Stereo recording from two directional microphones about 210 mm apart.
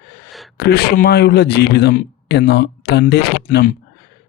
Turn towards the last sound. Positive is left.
turn(degrees=45)  # may be behind; listen again after turning